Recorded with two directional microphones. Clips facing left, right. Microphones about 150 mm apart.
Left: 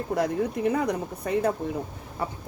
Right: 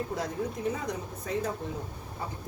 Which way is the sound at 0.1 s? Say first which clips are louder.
Left 7 dB; 60° left (ahead or behind).